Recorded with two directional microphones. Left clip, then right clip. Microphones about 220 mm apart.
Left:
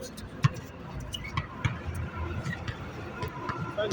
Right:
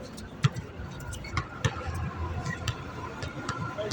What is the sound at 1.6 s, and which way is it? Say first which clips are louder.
Vehicle: right 5 dB; 50° right (ahead or behind).